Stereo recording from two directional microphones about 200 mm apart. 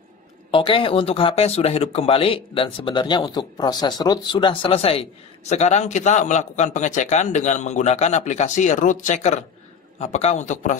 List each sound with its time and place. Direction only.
0.5 s a man's voice: 25° left (ahead or behind)